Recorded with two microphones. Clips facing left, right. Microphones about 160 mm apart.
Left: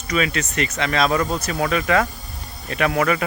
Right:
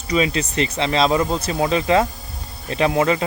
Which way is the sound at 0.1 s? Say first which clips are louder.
Right 3 dB; 30° right (ahead or behind).